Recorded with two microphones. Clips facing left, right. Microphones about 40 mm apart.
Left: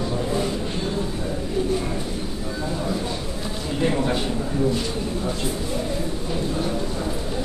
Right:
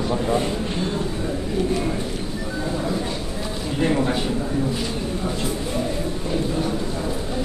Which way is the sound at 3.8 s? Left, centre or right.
Centre.